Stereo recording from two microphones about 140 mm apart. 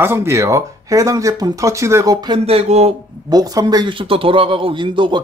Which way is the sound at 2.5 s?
50° right (ahead or behind).